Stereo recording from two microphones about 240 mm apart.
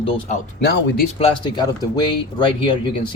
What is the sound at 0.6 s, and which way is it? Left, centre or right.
Speech, left.